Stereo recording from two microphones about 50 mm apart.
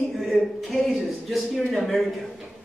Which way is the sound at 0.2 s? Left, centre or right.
Centre.